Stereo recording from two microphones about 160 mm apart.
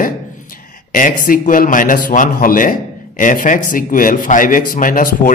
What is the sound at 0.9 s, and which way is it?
A man's voice, 60° left (ahead or behind).